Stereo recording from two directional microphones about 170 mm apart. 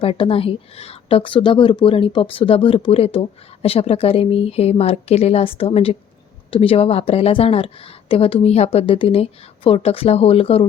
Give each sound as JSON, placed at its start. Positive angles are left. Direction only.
{"t": 0.0, "sound": "a woman's voice", "side_deg": 35}